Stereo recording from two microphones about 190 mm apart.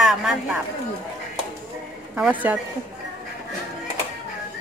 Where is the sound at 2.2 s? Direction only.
10° right (ahead or behind).